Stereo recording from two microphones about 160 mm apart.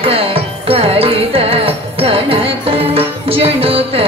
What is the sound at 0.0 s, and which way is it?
Music, 35° right (ahead or behind).